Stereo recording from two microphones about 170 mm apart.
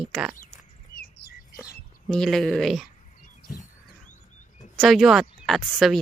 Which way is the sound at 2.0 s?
5° left (ahead or behind).